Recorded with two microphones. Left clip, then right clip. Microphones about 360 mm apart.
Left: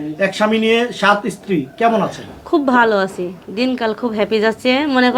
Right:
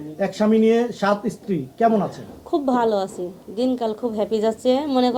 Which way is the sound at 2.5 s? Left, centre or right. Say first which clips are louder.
Left 7 dB; left.